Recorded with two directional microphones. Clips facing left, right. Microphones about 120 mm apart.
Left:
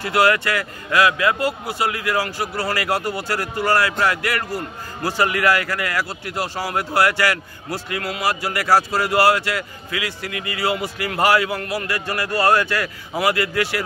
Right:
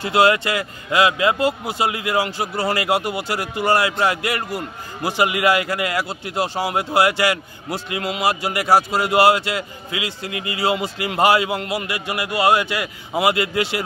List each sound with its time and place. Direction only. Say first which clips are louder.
0.0 s a man's voice: right 1 dB; 20° right (ahead or behind)